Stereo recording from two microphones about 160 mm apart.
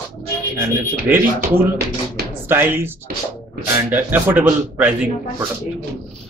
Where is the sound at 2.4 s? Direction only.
15° right (ahead or behind).